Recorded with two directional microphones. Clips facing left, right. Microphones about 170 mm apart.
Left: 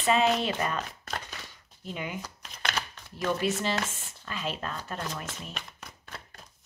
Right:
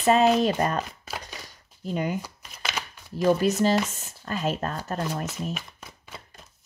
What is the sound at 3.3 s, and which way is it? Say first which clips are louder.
Speech: right 8 dB; 40° right (ahead or behind).